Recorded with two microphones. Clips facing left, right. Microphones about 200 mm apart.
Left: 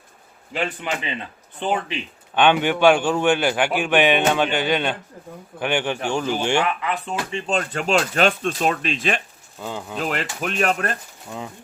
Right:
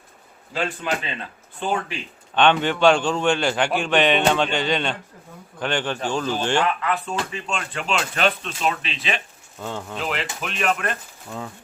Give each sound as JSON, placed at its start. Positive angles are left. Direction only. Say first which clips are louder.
{"t": 0.5, "sound": "a man's voice", "louder": "even", "side_deg": 15}
{"t": 2.3, "sound": "a man's voice", "louder": "left 1 dB", "side_deg": 10}
{"t": 9.6, "sound": "speech", "louder": "even", "side_deg": 0}
{"t": 10.0, "sound": "speech", "louder": "left 4 dB", "side_deg": 45}
{"t": 11.3, "sound": "a man's voice", "louder": "even", "side_deg": 15}